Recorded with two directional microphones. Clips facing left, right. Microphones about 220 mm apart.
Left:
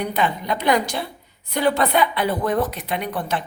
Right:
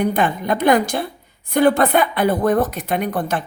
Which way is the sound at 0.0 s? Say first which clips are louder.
Right 4 dB; 50° right (ahead or behind).